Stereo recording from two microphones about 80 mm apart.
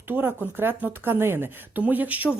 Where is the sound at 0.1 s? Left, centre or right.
Right.